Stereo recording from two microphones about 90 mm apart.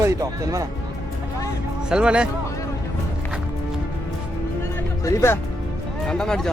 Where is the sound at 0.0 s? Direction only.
35° right (ahead or behind).